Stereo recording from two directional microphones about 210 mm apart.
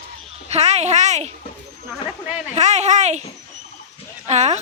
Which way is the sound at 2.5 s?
35° right (ahead or behind).